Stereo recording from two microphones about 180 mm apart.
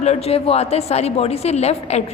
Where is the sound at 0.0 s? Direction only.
35° left (ahead or behind).